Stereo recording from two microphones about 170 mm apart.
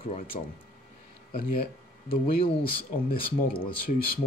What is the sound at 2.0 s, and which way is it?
Speech, 30° left (ahead or behind).